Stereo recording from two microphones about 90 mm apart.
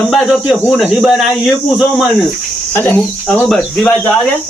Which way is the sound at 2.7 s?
20° left (ahead or behind).